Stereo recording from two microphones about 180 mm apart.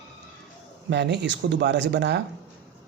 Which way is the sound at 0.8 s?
70° right (ahead or behind).